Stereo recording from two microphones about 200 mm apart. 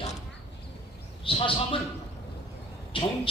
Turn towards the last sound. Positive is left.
turn(degrees=25)  # may be behind; listen again after turning